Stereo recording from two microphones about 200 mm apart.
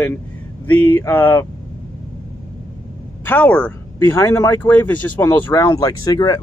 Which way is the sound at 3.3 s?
10° left (ahead or behind).